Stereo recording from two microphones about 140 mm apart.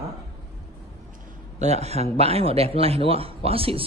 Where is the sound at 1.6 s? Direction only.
50° right (ahead or behind).